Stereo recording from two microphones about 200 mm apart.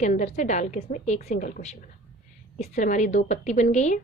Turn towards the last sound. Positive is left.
turn(degrees=35)  # may be behind; listen again after turning